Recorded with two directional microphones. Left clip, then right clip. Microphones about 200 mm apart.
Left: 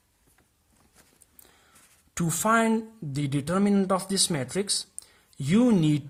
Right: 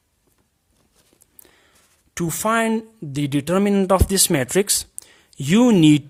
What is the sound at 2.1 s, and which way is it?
Speech, 35° right (ahead or behind).